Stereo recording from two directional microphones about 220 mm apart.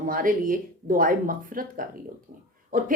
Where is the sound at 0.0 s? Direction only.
40° right (ahead or behind).